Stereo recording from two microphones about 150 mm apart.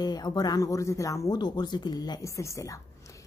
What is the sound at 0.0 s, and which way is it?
Speech, 25° left (ahead or behind).